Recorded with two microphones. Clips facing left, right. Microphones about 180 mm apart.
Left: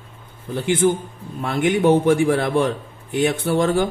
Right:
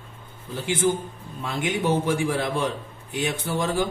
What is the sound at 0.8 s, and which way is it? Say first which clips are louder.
Speech: left 5 dB; 60° left (ahead or behind).